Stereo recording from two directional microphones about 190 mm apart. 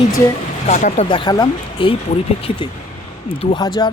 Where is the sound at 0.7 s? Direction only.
40° left (ahead or behind).